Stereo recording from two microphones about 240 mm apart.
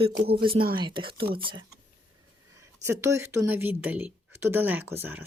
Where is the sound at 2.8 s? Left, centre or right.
Centre.